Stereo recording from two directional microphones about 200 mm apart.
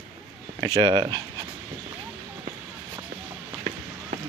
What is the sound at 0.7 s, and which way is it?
Speech, 20° right (ahead or behind).